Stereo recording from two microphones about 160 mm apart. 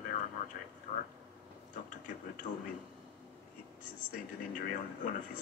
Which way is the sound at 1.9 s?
55° left (ahead or behind).